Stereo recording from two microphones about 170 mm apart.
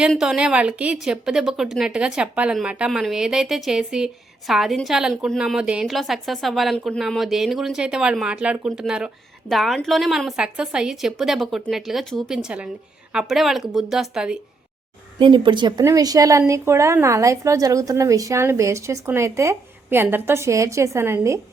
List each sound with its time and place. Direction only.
0.0 s a woman's voice: centre (ahead or behind)
15.2 s a woman's voice: 30° right (ahead or behind)